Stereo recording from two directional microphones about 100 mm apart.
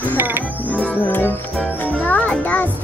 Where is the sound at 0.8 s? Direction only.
15° left (ahead or behind).